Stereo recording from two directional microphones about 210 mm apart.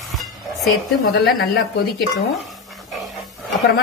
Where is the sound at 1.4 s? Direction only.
45° left (ahead or behind).